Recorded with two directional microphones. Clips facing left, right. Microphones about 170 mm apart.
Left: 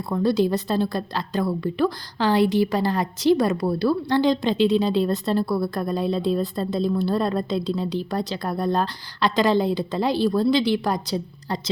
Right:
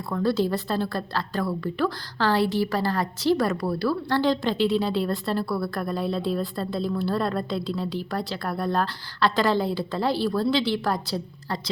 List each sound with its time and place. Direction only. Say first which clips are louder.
0.1 s a woman's voice: left 3 dB; 20° left (ahead or behind)